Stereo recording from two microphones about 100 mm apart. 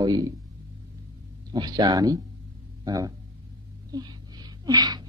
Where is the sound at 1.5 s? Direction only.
40° right (ahead or behind).